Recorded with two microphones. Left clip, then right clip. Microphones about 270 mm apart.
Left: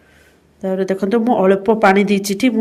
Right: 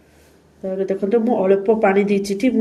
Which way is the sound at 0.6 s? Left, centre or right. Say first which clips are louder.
Left 3 dB; left.